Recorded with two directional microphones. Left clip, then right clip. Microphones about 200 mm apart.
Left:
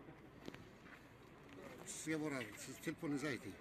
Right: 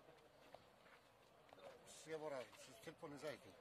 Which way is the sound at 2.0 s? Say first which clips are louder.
Left 6 dB; 40° right (ahead or behind).